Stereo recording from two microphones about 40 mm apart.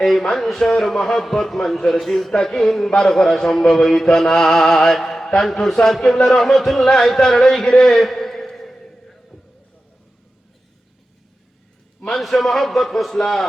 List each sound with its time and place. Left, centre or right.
0.0 s mantra: centre
6.4 s a man's voice: centre
12.0 s mantra: centre